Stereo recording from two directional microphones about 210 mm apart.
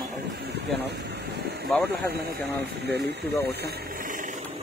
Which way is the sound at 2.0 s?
50° right (ahead or behind).